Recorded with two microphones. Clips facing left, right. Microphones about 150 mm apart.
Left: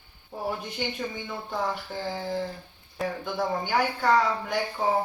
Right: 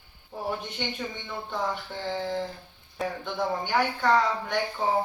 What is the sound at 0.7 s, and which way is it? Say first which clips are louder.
Speech: left 2 dB; 5° left (ahead or behind).